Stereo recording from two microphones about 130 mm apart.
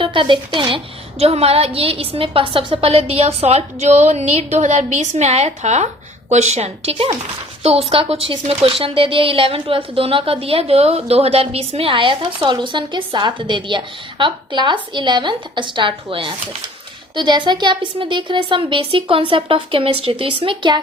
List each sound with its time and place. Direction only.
0.0 s a woman's voice: 40° right (ahead or behind)
1.2 s a woman's voice: 50° right (ahead or behind)
6.9 s a woman's voice: 40° right (ahead or behind)
7.6 s a woman's voice: 50° right (ahead or behind)